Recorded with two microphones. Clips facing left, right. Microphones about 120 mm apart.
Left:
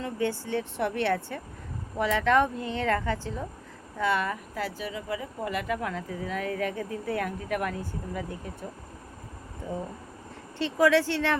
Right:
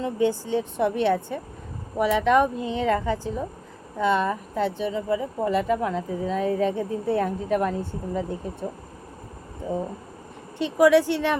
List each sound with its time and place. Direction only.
0.0 s speech: 20° right (ahead or behind)
10.6 s speech: 15° right (ahead or behind)